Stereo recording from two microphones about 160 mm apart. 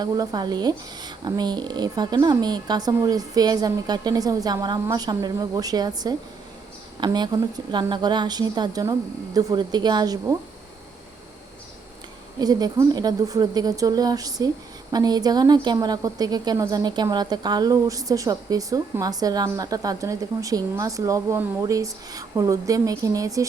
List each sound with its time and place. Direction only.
0.0 s a woman's voice: 25° right (ahead or behind)
12.4 s a woman's voice: 25° right (ahead or behind)